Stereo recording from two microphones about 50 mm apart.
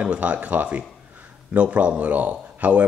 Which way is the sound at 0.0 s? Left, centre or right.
Right.